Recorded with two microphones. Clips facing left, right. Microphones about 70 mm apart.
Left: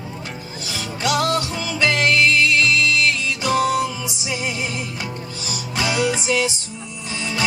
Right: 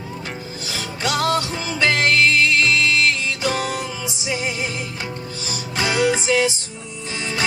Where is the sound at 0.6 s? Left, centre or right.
Right.